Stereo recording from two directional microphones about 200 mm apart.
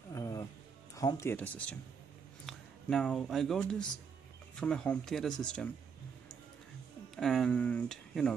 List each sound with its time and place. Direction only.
0.1 s music: 20° left (ahead or behind)
0.9 s speech: 15° left (ahead or behind)
7.2 s speech: centre (ahead or behind)